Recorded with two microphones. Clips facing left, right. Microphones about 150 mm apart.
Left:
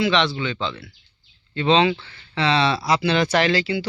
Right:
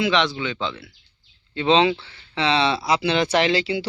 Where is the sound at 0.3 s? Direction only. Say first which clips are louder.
Left 1 dB; 10° right (ahead or behind).